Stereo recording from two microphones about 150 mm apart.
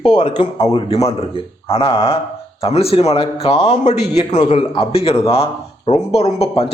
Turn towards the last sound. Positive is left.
turn(degrees=45)  # may be behind; listen again after turning